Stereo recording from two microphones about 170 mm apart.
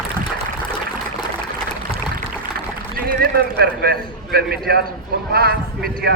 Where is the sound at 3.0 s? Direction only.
65° right (ahead or behind).